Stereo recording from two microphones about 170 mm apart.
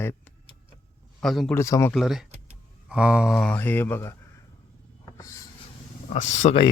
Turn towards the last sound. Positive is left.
turn(degrees=45)  # may be behind; listen again after turning